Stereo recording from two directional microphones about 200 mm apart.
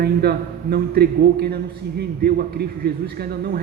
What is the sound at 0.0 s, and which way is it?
A man's voice, 55° right (ahead or behind).